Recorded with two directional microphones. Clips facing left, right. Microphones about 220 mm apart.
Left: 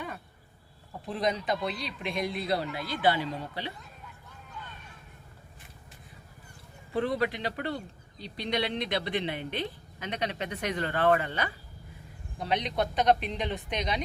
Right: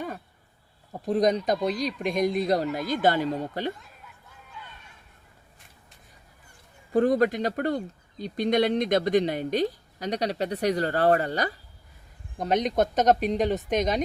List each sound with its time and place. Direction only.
1.0 s speech: 40° right (ahead or behind)
6.9 s speech: 45° right (ahead or behind)